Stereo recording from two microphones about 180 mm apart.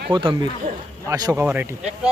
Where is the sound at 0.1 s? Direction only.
25° right (ahead or behind).